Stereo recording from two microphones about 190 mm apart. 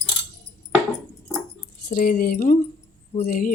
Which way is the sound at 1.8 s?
55° left (ahead or behind).